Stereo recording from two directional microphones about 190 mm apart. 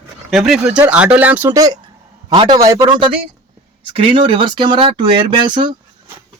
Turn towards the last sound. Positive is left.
turn(degrees=-25)  # may be behind; listen again after turning